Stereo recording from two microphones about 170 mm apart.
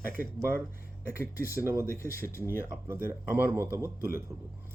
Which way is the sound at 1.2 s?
55° left (ahead or behind).